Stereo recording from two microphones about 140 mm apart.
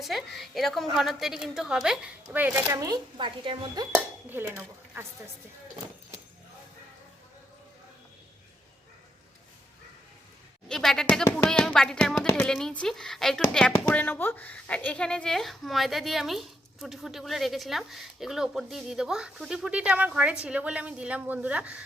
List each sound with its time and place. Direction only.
0.0 s speech: centre (ahead or behind); by 3.8 s 35° right (ahead or behind)
3.9 s speech: 15° right (ahead or behind)
10.7 s a woman's voice: 5° left (ahead or behind)